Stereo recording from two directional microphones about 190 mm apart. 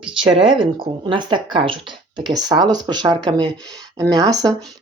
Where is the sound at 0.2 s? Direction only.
30° right (ahead or behind).